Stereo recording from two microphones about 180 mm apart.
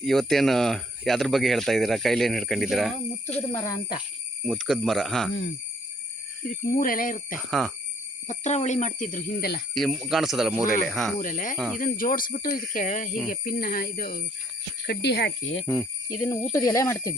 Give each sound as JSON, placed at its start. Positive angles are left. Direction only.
{"t": 0.0, "sound": "speech", "side_deg": 0}
{"t": 6.5, "sound": "speech", "side_deg": 50}
{"t": 7.3, "sound": "speech", "side_deg": 0}
{"t": 8.3, "sound": "speech", "side_deg": 40}
{"t": 9.7, "sound": "speech", "side_deg": 0}
{"t": 11.2, "sound": "speech", "side_deg": 45}
{"t": 11.5, "sound": "speech", "side_deg": 0}
{"t": 11.8, "sound": "speech", "side_deg": 50}
{"t": 14.8, "sound": "speech", "side_deg": 70}
{"t": 15.6, "sound": "speech", "side_deg": 5}